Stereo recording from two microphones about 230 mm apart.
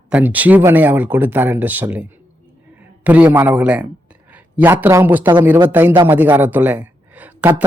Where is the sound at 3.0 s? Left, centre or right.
Centre.